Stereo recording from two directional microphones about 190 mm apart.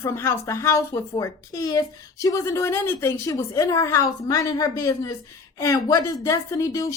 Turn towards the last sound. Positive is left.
turn(degrees=15)  # may be behind; listen again after turning